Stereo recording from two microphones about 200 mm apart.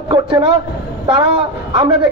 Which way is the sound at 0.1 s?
25° right (ahead or behind).